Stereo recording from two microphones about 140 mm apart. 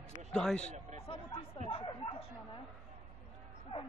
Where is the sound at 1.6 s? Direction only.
40° left (ahead or behind).